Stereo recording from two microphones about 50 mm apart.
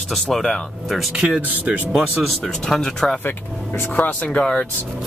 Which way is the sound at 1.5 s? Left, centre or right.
Right.